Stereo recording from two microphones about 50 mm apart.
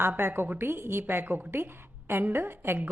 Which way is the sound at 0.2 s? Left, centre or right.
Right.